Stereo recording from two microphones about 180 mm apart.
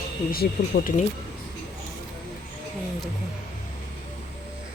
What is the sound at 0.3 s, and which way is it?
Speech, 55° left (ahead or behind).